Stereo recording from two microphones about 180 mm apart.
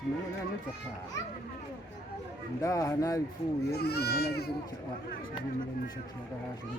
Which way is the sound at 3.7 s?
60° left (ahead or behind).